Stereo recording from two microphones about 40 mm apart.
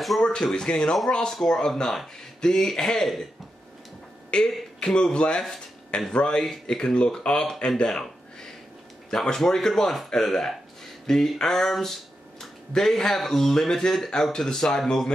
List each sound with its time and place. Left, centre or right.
0.4 s speech: centre
4.3 s speech: centre
6.4 s speech: centre
6.8 s speech: left
11.7 s a sound: centre
12.7 s speech: centre